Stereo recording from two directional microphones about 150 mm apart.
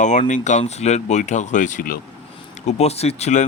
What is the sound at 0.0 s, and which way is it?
Speech, 55° left (ahead or behind).